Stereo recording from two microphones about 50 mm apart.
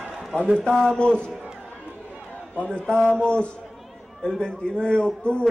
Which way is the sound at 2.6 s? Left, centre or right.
Centre.